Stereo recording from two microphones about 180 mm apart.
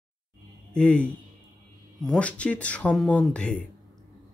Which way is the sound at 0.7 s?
5° left (ahead or behind).